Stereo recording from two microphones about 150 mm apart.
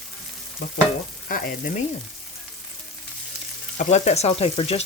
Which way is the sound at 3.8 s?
50° left (ahead or behind).